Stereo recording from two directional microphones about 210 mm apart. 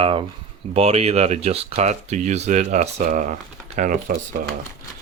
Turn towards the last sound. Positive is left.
turn(degrees=-45)  # may be behind; listen again after turning